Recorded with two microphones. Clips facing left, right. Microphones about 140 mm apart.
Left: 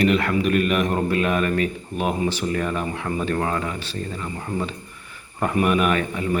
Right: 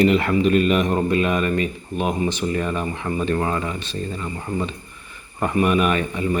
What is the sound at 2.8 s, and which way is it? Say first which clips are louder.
Speech: right 1 dB; centre (ahead or behind).